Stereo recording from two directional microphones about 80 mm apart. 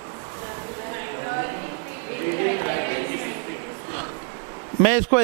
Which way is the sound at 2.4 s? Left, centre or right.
Right.